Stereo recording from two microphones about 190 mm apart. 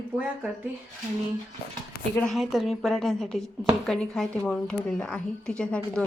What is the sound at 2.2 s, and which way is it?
Speech, centre (ahead or behind).